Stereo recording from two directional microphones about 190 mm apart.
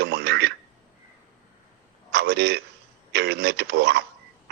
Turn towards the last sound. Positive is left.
turn(degrees=-60)  # may be behind; listen again after turning